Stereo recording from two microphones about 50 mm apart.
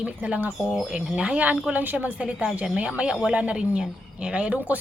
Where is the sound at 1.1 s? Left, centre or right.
Right.